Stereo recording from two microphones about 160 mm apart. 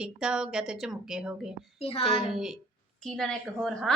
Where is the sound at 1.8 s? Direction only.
35° left (ahead or behind).